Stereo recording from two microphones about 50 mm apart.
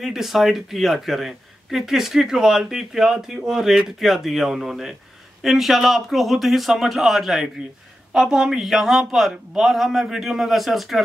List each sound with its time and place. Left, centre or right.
0.0 s speech: centre